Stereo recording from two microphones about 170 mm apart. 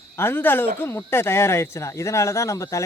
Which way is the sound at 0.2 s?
15° left (ahead or behind).